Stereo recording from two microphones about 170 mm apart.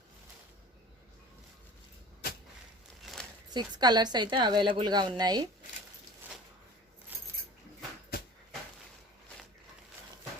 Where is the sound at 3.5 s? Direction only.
25° right (ahead or behind).